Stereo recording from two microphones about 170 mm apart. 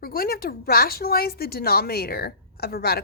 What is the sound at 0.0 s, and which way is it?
A woman's voice, 60° left (ahead or behind).